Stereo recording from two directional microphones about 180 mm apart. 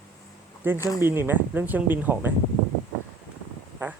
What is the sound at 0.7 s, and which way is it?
Speech, 20° left (ahead or behind).